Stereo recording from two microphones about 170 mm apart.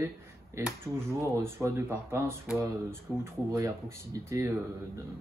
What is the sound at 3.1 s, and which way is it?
Speech, 5° right (ahead or behind).